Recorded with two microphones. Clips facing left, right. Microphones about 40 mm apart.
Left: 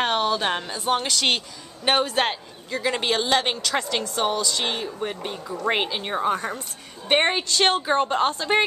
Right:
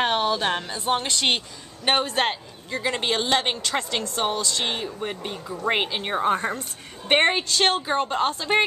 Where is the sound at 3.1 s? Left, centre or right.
Centre.